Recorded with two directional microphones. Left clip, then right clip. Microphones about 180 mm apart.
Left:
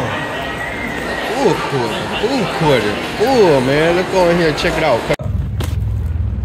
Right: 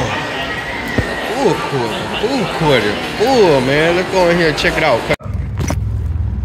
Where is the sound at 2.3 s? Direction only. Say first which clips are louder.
Even; 5° right (ahead or behind).